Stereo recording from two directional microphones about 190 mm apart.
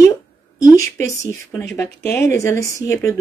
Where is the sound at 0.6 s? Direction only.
15° left (ahead or behind).